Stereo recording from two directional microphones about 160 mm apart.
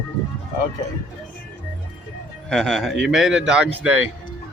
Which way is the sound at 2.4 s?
Centre (ahead or behind).